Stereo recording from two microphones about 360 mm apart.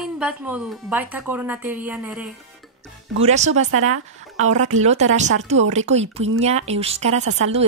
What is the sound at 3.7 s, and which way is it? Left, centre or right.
Speech, right.